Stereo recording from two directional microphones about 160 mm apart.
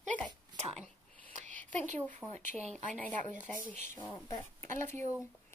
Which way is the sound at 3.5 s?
5° left (ahead or behind).